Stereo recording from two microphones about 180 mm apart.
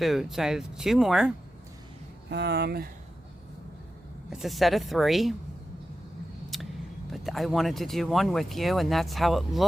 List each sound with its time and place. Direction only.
0.0 s speech: centre (ahead or behind)
2.3 s speech: 70° right (ahead or behind)
4.3 s speech: centre (ahead or behind)
6.5 s a sound: centre (ahead or behind)
7.1 s speech: centre (ahead or behind)